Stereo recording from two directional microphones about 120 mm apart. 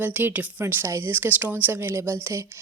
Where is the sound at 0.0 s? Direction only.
15° right (ahead or behind).